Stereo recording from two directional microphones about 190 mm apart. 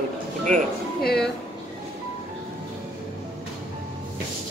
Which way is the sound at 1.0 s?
55° left (ahead or behind).